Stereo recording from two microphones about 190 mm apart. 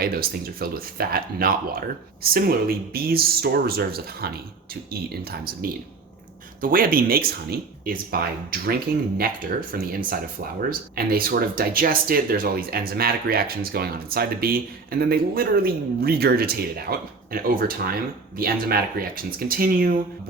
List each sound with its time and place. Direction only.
0.0 s speech: 50° right (ahead or behind)